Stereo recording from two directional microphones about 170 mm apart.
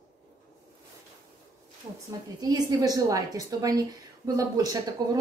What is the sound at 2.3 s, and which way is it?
A woman's voice, 25° right (ahead or behind).